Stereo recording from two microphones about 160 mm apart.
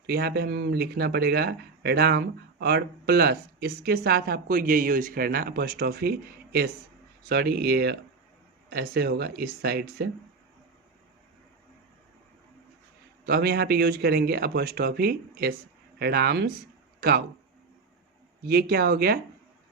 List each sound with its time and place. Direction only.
0.0 s speech: 80° right
13.2 s speech: 75° right (ahead or behind)
17.0 s speech: 75° right (ahead or behind)
18.4 s speech: 70° right (ahead or behind)